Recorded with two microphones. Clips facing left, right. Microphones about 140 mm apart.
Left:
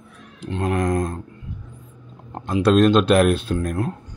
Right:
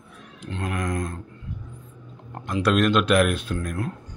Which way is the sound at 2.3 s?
20° left (ahead or behind).